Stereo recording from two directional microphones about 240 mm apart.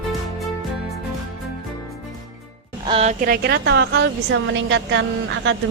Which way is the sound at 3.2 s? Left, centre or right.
Right.